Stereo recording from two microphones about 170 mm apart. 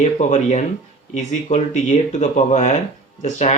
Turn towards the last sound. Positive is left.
turn(degrees=40)  # may be behind; listen again after turning